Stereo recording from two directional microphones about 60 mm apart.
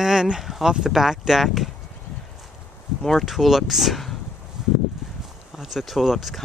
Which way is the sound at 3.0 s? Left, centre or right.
Centre.